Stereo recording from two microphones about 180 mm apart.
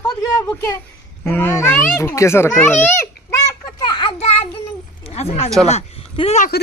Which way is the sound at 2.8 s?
15° left (ahead or behind).